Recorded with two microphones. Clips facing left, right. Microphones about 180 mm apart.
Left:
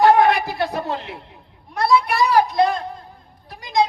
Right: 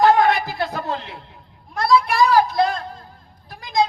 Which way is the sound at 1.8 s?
20° left (ahead or behind).